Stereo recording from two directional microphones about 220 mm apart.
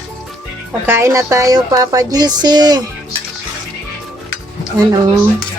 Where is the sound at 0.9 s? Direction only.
10° right (ahead or behind).